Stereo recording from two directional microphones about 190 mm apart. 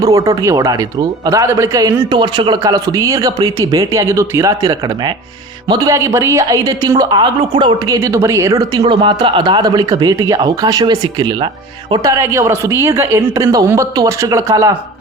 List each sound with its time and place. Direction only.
0.0 s a man's voice: 15° right (ahead or behind)